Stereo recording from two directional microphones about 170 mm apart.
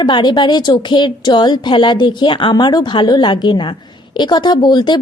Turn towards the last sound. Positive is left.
turn(degrees=25)  # may be behind; listen again after turning